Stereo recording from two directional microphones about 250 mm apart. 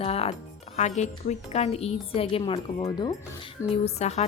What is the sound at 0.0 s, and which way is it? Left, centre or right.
A woman's voice, left.